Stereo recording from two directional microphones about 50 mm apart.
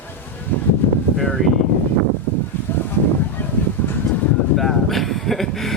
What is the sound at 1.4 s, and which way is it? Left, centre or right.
Speech, centre.